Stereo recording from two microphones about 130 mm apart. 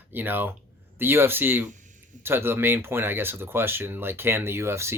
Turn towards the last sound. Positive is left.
turn(degrees=-20)  # may be behind; listen again after turning